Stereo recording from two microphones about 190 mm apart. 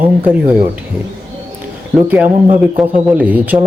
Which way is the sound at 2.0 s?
5° right (ahead or behind).